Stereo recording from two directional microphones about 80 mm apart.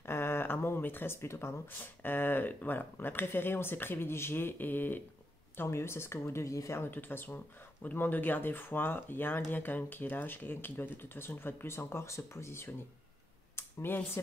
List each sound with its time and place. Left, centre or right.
0.0 s speech: left
6.8 s speech: left